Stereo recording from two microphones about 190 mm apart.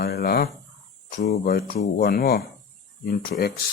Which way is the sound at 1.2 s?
50° left (ahead or behind).